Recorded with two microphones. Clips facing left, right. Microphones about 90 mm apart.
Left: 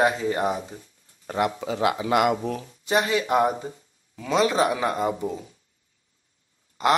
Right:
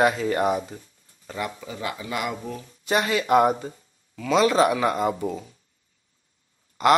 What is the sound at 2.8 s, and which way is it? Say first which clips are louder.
Speech: even; 20° left (ahead or behind).